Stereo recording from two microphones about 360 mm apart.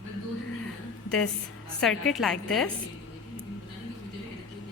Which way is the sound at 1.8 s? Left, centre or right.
Centre.